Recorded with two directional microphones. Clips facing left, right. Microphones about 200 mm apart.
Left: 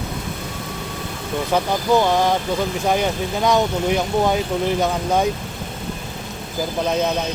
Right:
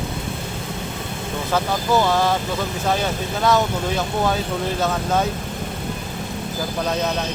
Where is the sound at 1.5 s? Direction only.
15° left (ahead or behind).